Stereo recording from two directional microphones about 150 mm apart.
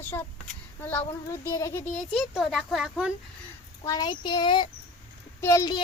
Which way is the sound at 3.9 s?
30° left (ahead or behind).